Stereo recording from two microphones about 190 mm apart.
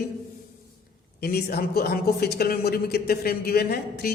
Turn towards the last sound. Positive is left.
turn(degrees=55)  # may be behind; listen again after turning